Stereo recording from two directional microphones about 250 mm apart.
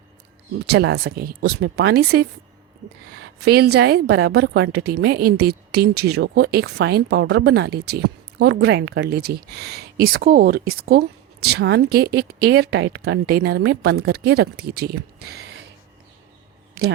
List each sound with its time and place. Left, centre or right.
0.7 s a woman's voice: right